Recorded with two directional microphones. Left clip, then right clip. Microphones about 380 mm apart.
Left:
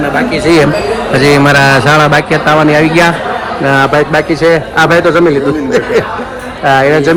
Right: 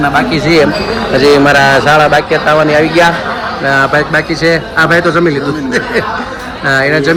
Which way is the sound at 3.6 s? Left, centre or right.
Left.